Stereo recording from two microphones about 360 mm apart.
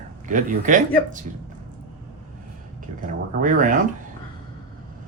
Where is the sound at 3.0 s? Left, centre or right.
Right.